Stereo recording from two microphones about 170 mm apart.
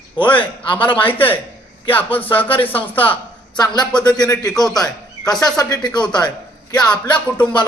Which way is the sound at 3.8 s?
25° left (ahead or behind).